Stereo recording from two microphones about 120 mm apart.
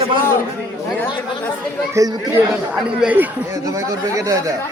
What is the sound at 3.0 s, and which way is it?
Speech, 15° right (ahead or behind).